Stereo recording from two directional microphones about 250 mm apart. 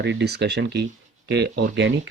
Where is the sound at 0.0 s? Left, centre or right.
Right.